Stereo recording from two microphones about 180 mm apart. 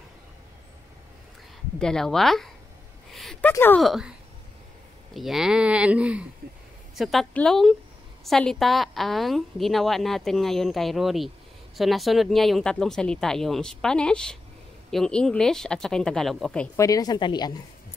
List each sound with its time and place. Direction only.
1.8 s a woman's voice: 5° left (ahead or behind)
3.1 s a sound: centre (ahead or behind)
3.8 s a woman's voice: centre (ahead or behind)
5.1 s a woman's voice: centre (ahead or behind)
16.7 s a woman's voice: 20° left (ahead or behind)